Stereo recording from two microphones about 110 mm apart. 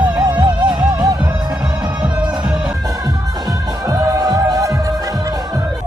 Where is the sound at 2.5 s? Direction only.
10° right (ahead or behind).